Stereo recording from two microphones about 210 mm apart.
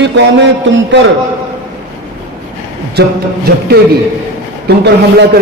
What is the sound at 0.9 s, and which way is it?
Speech, 55° right (ahead or behind).